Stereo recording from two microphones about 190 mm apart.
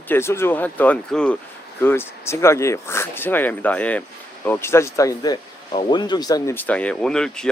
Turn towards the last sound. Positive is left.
turn(degrees=5)  # may be behind; listen again after turning